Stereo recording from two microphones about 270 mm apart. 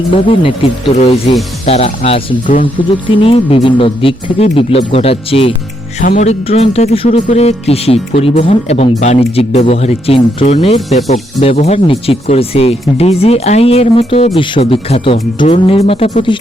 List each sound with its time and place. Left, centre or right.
0.1 s speech: centre